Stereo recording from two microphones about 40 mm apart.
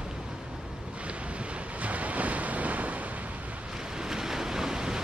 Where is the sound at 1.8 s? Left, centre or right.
Right.